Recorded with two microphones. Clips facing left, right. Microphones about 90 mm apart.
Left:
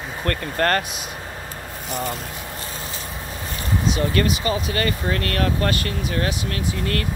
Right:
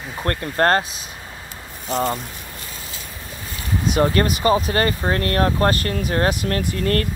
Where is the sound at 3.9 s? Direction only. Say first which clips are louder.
Right 6 dB; 40° right (ahead or behind).